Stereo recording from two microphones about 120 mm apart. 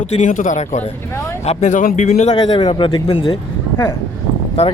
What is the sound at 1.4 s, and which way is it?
Speech, 70° left (ahead or behind).